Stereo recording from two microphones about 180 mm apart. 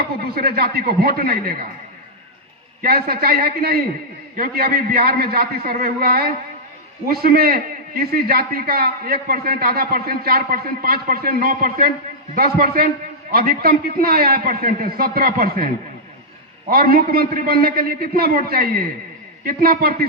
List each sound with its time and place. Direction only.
0.2 s a man's voice: 60° right (ahead or behind)
2.8 s a man's voice: 55° right (ahead or behind)